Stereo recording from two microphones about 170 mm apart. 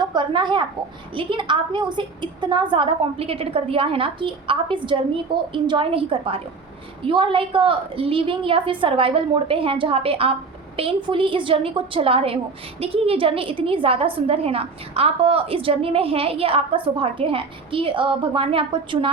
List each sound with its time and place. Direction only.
0.0 s a woman's voice: 25° right (ahead or behind)